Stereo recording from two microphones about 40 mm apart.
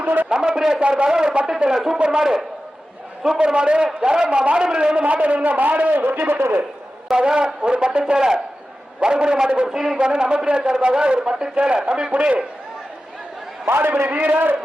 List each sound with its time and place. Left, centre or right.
0.0 s a man's voice: right
0.3 s a man's voice: right
1.7 s a man's voice: centre
2.0 s a man's voice: right
7.1 s a man's voice: right
9.6 s a man's voice: centre
10.1 s a man's voice: right
13.7 s a man's voice: right
14.1 s a man's voice: right
14.3 s a man's voice: right